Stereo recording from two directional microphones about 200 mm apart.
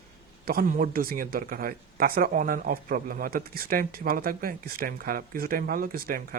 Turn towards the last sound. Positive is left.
turn(degrees=-45)  # may be behind; listen again after turning